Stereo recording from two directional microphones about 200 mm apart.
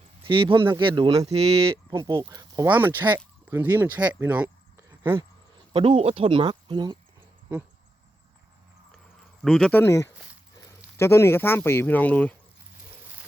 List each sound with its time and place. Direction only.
0.2 s speech: 25° right (ahead or behind)
2.6 s speech: 10° right (ahead or behind)
5.7 s speech: 25° right (ahead or behind)
9.4 s speech: centre (ahead or behind)
9.7 s speech: 15° left (ahead or behind)